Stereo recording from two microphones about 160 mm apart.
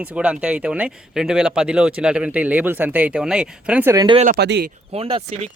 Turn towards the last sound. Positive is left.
turn(degrees=-35)  # may be behind; listen again after turning